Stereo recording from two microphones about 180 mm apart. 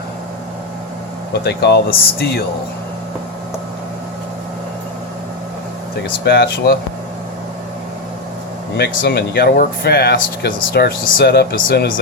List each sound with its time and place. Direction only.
1.3 s speech: 65° left (ahead or behind)
6.2 s speech: 60° left (ahead or behind)
8.8 s speech: 65° left (ahead or behind)